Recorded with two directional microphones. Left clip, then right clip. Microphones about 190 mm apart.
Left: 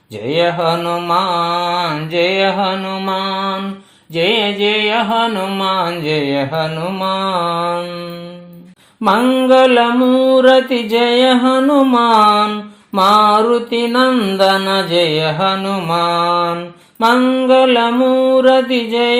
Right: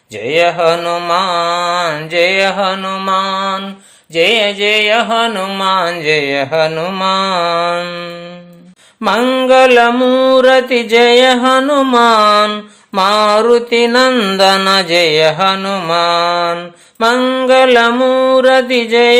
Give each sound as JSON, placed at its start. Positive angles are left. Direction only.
{"t": 0.3, "sound": "mantra", "side_deg": -35}
{"t": 9.0, "sound": "mantra", "side_deg": -40}